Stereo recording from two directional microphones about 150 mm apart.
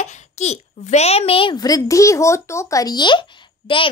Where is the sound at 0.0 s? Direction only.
50° left (ahead or behind).